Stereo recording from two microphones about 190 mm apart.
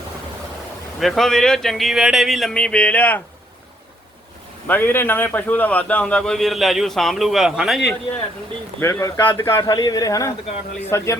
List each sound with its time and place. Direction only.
0.9 s a man's voice: centre (ahead or behind)
4.7 s a man's voice: 10° left (ahead or behind)
8.8 s a man's voice: 15° left (ahead or behind)